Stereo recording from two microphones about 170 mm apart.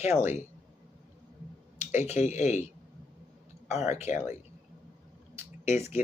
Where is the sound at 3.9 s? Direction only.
40° left (ahead or behind).